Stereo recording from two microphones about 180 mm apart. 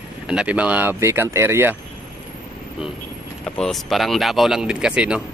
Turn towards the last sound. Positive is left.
turn(degrees=-5)  # may be behind; listen again after turning